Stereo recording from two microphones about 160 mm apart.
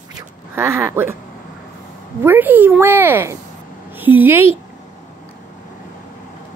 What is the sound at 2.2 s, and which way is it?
Speech, 10° right (ahead or behind).